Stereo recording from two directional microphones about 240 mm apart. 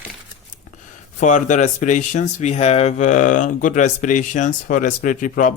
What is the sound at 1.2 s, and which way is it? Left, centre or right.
Speech, left.